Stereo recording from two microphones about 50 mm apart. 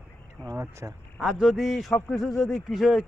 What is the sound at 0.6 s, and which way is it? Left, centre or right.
Speech, right.